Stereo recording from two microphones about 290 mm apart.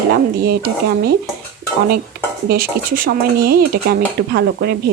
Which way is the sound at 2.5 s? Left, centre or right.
Right.